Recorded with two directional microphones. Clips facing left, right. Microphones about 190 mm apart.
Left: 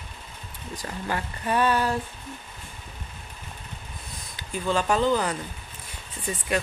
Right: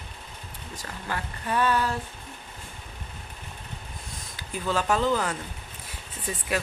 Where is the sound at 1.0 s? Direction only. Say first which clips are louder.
Left 3 dB; 20° left (ahead or behind).